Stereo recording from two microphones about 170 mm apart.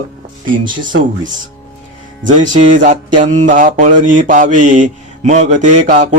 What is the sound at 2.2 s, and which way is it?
Speech, 45° right (ahead or behind).